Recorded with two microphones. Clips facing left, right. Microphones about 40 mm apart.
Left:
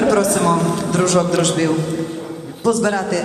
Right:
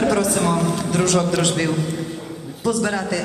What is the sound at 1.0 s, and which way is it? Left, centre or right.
Speech, centre.